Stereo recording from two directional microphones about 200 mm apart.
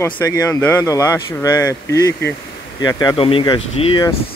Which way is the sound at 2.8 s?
20° left (ahead or behind).